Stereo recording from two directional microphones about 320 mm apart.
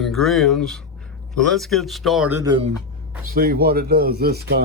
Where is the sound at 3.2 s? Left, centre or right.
Right.